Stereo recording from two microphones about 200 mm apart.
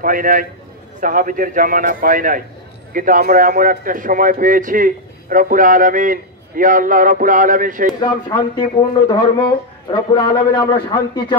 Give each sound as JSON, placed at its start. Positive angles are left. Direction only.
{"t": 0.0, "sound": "speech", "side_deg": -45}
{"t": 8.0, "sound": "speech", "side_deg": 20}